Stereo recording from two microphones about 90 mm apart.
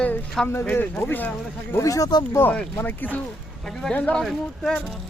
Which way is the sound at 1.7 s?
40° left (ahead or behind).